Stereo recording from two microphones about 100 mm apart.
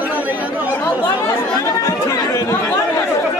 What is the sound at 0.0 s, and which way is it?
Chatter, 15° right (ahead or behind).